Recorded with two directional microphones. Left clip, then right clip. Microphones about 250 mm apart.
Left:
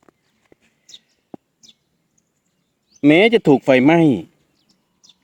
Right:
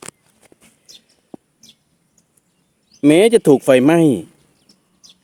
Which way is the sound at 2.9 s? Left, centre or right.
Centre.